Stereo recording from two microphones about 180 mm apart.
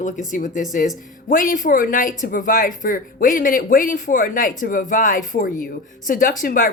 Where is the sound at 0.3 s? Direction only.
45° left (ahead or behind).